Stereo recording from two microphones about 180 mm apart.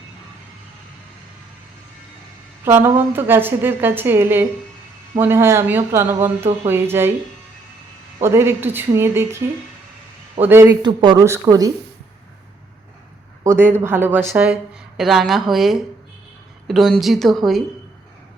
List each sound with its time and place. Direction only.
2.6 s a woman's voice: 15° right (ahead or behind)
8.2 s a woman's voice: 15° right (ahead or behind)
10.4 s a woman's voice: 10° right (ahead or behind)
10.8 s speech: 25° right (ahead or behind)
13.4 s a woman's voice: 15° right (ahead or behind)